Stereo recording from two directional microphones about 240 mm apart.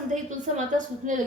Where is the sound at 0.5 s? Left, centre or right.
Right.